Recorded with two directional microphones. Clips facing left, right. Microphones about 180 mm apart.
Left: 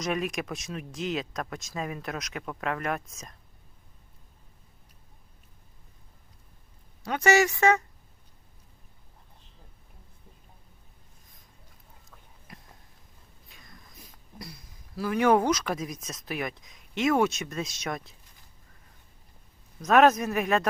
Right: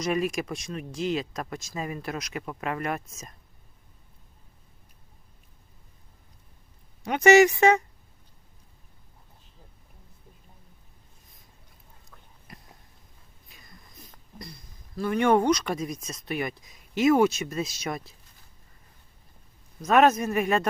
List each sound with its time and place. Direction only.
0.0 s speech: centre (ahead or behind)
7.0 s speech: 20° right (ahead or behind)
12.5 s a sound: centre (ahead or behind)
13.5 s speech: 5° right (ahead or behind)
19.8 s speech: centre (ahead or behind)